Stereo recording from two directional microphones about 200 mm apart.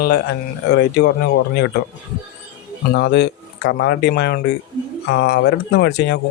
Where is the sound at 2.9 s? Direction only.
55° left (ahead or behind).